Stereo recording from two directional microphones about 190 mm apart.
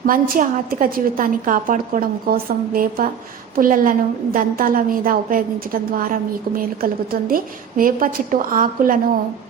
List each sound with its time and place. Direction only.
0.0 s a woman's voice: 45° right (ahead or behind)